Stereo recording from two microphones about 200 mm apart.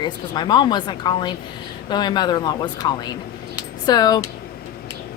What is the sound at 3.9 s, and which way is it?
Speech, 20° left (ahead or behind).